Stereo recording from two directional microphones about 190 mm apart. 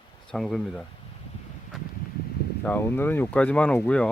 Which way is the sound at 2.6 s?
10° left (ahead or behind).